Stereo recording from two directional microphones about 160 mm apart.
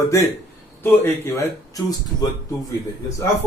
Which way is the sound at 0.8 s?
15° left (ahead or behind).